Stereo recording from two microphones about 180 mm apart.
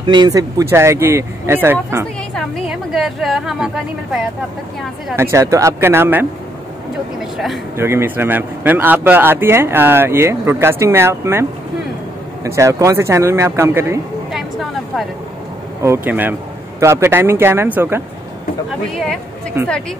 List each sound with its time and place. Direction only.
0.0 s a man's voice: 25° right (ahead or behind)
2.3 s a woman's voice: centre (ahead or behind)
5.1 s a man's voice: 15° right (ahead or behind)
7.7 s a man's voice: 15° right (ahead or behind)
12.4 s a man's voice: 15° right (ahead or behind)
14.3 s vehicle: centre (ahead or behind)
15.8 s a man's voice: 15° right (ahead or behind)